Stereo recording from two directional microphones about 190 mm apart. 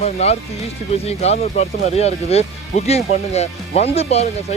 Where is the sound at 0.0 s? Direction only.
35° left (ahead or behind).